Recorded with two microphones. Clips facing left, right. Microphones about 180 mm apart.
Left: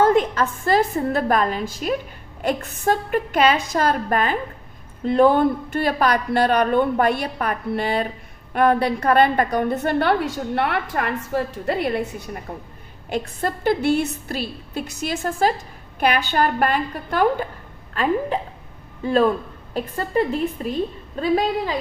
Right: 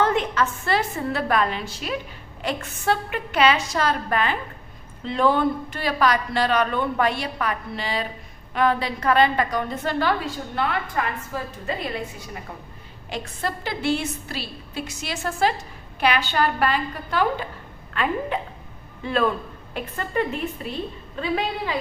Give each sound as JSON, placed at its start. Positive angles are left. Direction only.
{"t": 0.0, "sound": "a woman's voice", "side_deg": 45}
{"t": 17.9, "sound": "a woman's voice", "side_deg": 35}